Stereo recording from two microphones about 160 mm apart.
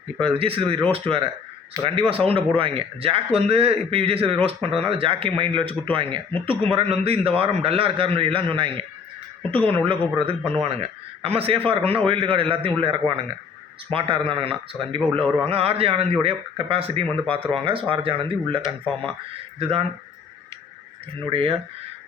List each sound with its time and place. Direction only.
0.2 s a man's voice: 35° right (ahead or behind)
21.2 s a man's voice: 30° right (ahead or behind)